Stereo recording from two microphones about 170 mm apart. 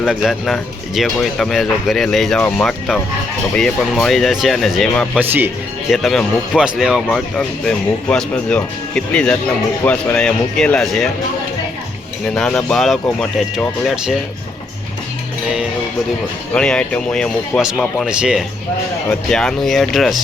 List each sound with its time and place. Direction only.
0.0 s speech: centre (ahead or behind)
5.2 s speech: 10° right (ahead or behind)
5.9 s speech: centre (ahead or behind)
12.3 s speech: centre (ahead or behind)
16.6 s speech: 5° left (ahead or behind)